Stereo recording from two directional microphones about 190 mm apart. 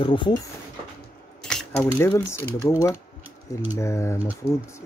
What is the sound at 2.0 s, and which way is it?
Speech, 10° left (ahead or behind).